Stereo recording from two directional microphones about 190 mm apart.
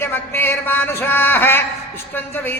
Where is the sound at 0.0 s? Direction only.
10° left (ahead or behind).